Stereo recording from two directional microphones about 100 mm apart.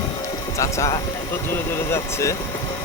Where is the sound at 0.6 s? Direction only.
30° left (ahead or behind).